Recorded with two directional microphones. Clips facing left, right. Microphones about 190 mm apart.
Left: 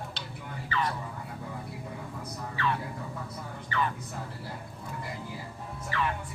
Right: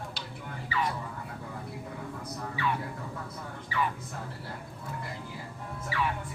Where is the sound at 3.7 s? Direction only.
5° right (ahead or behind).